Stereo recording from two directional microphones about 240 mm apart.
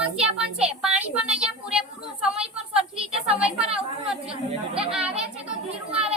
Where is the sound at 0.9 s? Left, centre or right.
Centre.